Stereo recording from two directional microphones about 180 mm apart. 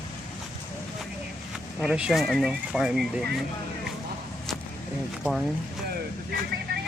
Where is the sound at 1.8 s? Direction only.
5° right (ahead or behind).